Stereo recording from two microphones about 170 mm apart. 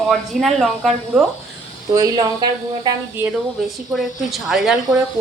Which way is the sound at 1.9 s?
20° right (ahead or behind).